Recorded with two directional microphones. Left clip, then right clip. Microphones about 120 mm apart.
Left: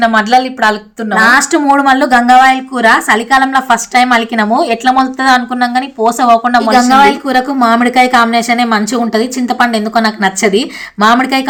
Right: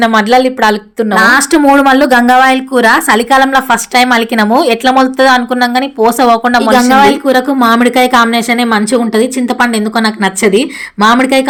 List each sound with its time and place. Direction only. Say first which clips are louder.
0.0 s a woman's voice: right 1 dB; 45° right (ahead or behind)